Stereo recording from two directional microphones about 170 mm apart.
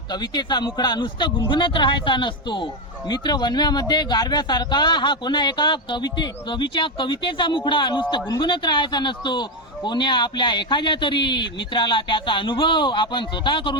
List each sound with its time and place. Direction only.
0.1 s speech: 25° left (ahead or behind)